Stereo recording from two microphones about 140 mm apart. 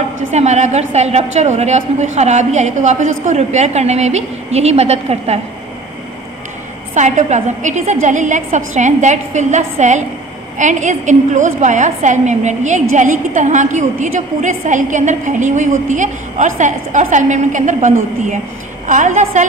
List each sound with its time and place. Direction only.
0.3 s a woman's voice: 55° right (ahead or behind)
6.9 s a woman's voice: 55° right (ahead or behind)